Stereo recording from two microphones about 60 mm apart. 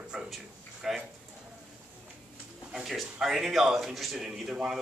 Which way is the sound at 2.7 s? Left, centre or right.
Centre.